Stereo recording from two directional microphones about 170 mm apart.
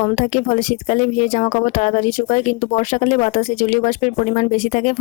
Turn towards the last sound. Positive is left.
turn(degrees=45)  # may be behind; listen again after turning